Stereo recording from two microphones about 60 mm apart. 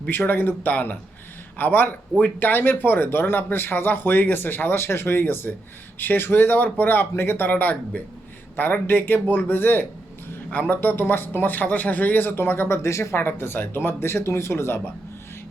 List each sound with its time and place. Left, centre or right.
0.1 s speech: left